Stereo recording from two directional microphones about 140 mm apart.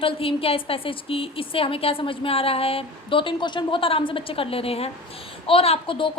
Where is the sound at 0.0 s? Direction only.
40° left (ahead or behind).